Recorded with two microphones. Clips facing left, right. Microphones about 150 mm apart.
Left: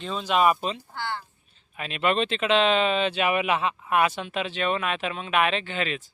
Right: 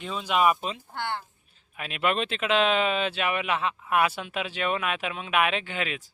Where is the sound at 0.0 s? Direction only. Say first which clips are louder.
Left 2 dB; 10° right (ahead or behind).